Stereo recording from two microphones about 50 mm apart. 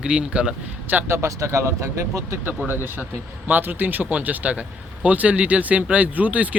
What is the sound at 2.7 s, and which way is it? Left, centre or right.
Speech, right.